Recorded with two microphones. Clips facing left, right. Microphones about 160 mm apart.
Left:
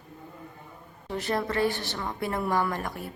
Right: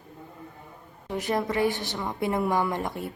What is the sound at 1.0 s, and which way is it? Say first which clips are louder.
A woman's voice: right 2 dB; 15° right (ahead or behind).